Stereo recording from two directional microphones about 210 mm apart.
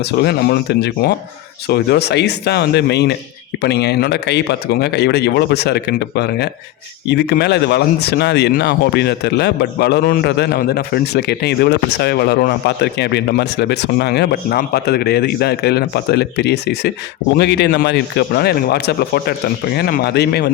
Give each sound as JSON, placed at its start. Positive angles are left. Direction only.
{"t": 0.0, "sound": "speech", "side_deg": 50}